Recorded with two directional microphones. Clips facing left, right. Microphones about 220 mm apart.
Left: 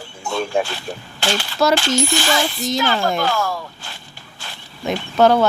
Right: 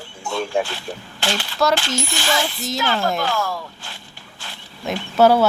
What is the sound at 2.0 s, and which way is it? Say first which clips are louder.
Speech: left 4 dB; 45° left (ahead or behind).